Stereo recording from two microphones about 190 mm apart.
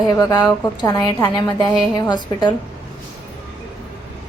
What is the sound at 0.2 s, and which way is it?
A woman's voice, 15° left (ahead or behind).